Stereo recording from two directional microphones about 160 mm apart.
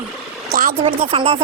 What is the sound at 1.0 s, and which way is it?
Speech, 35° right (ahead or behind).